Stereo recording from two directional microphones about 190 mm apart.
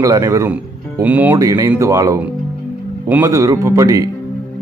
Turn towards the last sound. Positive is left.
turn(degrees=-20)  # may be behind; listen again after turning